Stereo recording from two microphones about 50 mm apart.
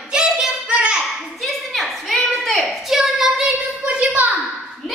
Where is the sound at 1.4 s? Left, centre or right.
Centre.